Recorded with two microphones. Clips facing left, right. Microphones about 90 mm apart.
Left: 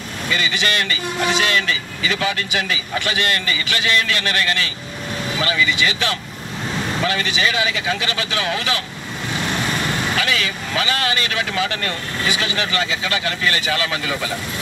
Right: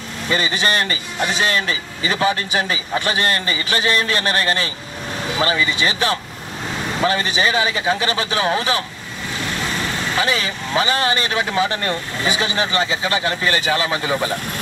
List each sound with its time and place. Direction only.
0.3 s a man's voice: 35° right (ahead or behind)
10.1 s speech: 30° right (ahead or behind)